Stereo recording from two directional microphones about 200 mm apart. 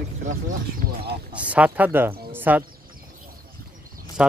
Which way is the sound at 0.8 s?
55° right (ahead or behind).